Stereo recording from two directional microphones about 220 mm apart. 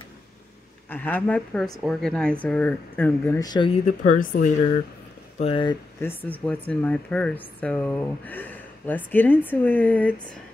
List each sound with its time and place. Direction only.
0.8 s a woman's voice: 10° left (ahead or behind)
4.2 s speech: 40° left (ahead or behind)
5.4 s speech: 25° left (ahead or behind); by 10.2 s 5° left (ahead or behind)